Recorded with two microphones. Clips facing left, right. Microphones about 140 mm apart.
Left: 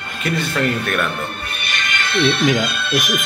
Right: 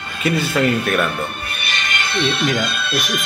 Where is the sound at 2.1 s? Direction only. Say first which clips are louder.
Left 4 dB; 5° right (ahead or behind).